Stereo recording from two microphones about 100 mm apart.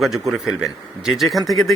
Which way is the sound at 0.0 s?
5° right (ahead or behind).